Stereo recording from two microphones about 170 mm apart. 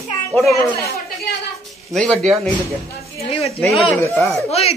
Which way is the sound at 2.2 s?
Centre (ahead or behind).